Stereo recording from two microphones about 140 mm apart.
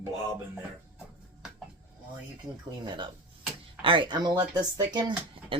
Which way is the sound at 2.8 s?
35° right (ahead or behind).